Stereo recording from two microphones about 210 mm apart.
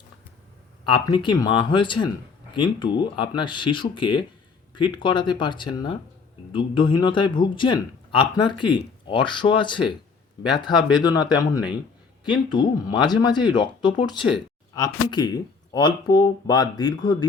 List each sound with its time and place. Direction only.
0.9 s a man's voice: 20° left (ahead or behind)